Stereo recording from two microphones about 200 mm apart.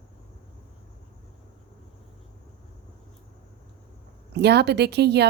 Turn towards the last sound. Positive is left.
turn(degrees=-55)  # may be behind; listen again after turning